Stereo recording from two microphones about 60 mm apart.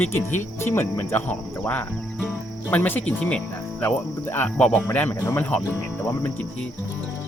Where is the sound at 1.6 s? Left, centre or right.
Left.